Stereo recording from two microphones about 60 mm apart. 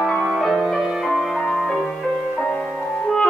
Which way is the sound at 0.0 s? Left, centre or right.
Centre.